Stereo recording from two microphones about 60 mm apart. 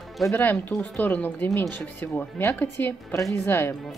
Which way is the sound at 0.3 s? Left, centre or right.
Left.